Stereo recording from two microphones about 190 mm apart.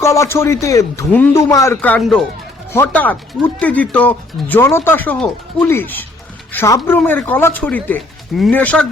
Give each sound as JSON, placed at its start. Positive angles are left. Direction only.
{"t": 0.0, "sound": "speech", "side_deg": 15}